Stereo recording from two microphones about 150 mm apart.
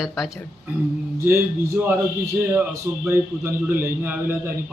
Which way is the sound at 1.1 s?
15° right (ahead or behind).